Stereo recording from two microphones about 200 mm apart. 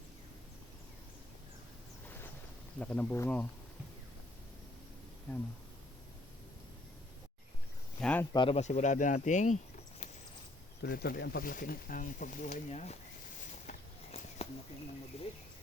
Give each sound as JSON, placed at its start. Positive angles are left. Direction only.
{"t": 2.7, "sound": "speech", "side_deg": 5}
{"t": 8.0, "sound": "speech", "side_deg": 5}
{"t": 8.3, "sound": "speech", "side_deg": 25}
{"t": 10.8, "sound": "speech", "side_deg": 50}
{"t": 13.7, "sound": "a sound", "side_deg": 30}
{"t": 15.1, "sound": "speech", "side_deg": 30}